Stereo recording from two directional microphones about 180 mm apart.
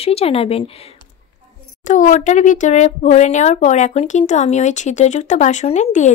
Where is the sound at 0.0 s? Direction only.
35° left (ahead or behind).